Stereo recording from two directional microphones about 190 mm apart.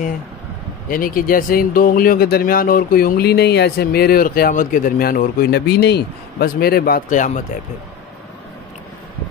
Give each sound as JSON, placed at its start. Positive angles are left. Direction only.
{"t": 0.8, "sound": "speech", "side_deg": 45}